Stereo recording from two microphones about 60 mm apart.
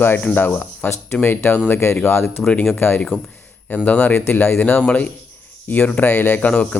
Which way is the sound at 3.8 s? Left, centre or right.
Left.